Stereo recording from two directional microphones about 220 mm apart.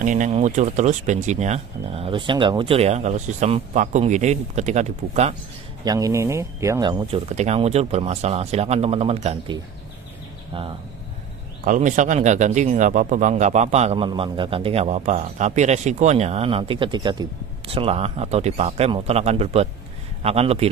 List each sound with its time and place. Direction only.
0.0 s speech: 35° right (ahead or behind)
5.9 s speech: 15° right (ahead or behind)
11.6 s speech: 35° right (ahead or behind)